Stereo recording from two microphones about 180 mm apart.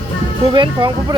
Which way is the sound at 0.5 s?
25° right (ahead or behind).